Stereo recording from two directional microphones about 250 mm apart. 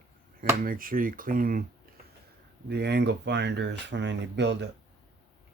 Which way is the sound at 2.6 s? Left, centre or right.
Right.